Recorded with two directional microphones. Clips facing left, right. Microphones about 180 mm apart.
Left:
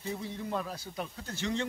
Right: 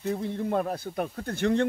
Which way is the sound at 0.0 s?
55° right (ahead or behind).